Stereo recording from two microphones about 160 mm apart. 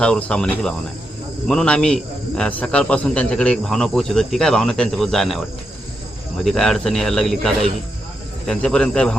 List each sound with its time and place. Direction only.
0.0 s speech: 5° left (ahead or behind)
6.4 s speech: 5° left (ahead or behind)